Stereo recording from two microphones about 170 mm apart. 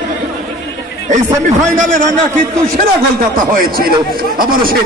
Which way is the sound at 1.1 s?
45° right (ahead or behind).